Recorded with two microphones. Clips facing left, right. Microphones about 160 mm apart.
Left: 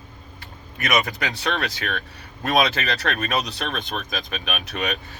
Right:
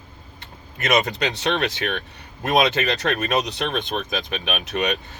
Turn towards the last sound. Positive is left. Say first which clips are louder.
# right 4 dB
turn(degrees=-20)  # may be behind; listen again after turning